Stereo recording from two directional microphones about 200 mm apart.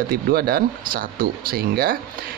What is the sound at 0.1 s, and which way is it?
Speech, 50° right (ahead or behind).